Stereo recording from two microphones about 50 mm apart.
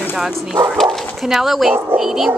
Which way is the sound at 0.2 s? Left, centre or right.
Centre.